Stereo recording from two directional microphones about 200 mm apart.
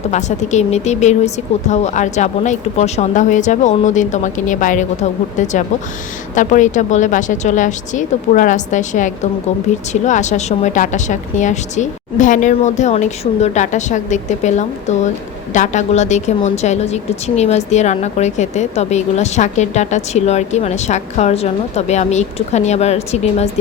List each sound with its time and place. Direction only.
0.1 s a woman's voice: 35° left (ahead or behind)